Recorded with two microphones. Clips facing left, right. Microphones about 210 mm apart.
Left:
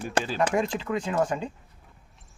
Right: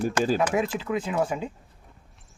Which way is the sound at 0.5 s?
5° right (ahead or behind).